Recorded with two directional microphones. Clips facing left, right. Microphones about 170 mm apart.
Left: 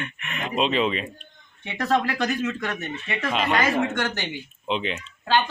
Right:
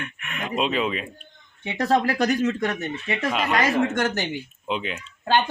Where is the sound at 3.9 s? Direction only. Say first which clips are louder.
Right 3 dB; 45° right (ahead or behind).